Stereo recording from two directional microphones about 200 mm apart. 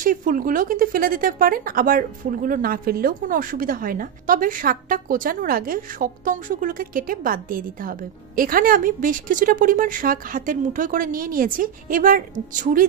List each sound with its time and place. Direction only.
0.0 s a woman's voice: 40° right (ahead or behind)